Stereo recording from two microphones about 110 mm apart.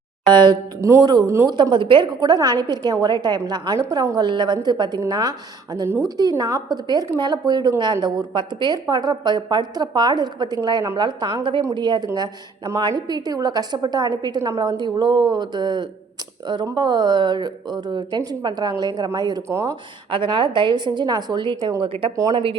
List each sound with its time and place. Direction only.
0.3 s a woman's voice: 40° right (ahead or behind)
0.8 s speech: 30° right (ahead or behind)
1.7 s a woman's voice: 50° right (ahead or behind)
19.5 s speech: 25° right (ahead or behind)
20.1 s a woman's voice: 50° right (ahead or behind)
21.8 s a woman's voice: 50° right (ahead or behind)
22.1 s a woman's voice: 30° right (ahead or behind)